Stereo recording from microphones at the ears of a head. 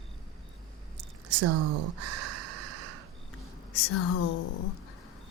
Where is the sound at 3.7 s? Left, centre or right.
Left.